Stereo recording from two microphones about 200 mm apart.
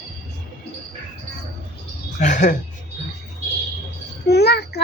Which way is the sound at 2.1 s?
40° left (ahead or behind).